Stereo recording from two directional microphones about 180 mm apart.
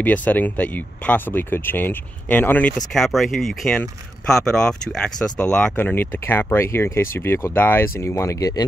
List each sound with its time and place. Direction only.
0.0 s speech: 10° left (ahead or behind)